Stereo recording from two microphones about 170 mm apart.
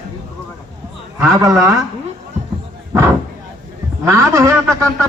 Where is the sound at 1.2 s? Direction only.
20° right (ahead or behind).